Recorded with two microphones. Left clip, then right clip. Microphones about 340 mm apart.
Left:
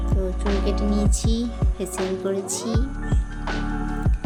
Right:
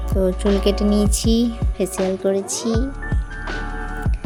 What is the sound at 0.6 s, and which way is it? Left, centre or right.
Speech, right.